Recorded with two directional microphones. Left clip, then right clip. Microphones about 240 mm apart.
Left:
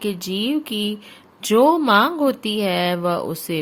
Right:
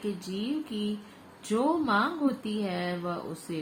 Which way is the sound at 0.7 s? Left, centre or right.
Left.